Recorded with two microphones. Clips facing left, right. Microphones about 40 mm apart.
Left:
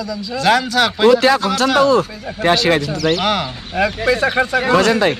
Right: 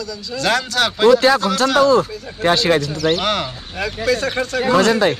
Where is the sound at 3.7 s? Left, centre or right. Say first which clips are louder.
Left 4 dB; left.